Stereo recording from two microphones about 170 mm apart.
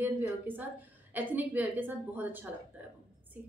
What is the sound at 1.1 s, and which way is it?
A woman's voice, 10° right (ahead or behind).